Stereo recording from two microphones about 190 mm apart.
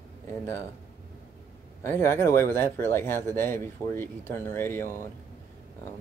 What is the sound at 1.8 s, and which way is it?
Speech, 10° left (ahead or behind).